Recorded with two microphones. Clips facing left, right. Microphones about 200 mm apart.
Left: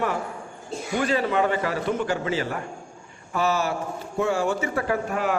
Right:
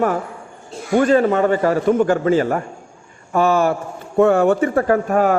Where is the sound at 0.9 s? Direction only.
50° right (ahead or behind).